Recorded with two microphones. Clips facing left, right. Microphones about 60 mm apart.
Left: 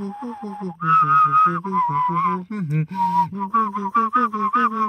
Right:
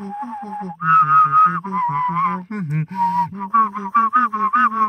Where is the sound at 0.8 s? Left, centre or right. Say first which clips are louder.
Right 2 dB; right.